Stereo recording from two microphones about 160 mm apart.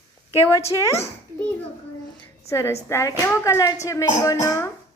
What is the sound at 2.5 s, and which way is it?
A woman's voice, 15° left (ahead or behind).